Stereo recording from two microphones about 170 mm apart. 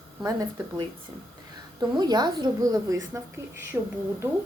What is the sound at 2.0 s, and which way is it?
A woman's voice, 25° right (ahead or behind).